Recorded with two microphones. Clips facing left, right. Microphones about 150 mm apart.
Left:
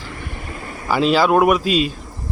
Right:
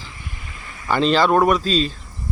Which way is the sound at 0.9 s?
5° left (ahead or behind).